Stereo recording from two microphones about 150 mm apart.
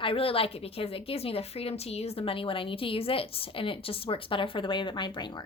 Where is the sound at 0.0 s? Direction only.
35° left (ahead or behind).